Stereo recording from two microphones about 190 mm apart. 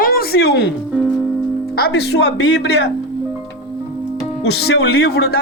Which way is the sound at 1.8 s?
60° left (ahead or behind).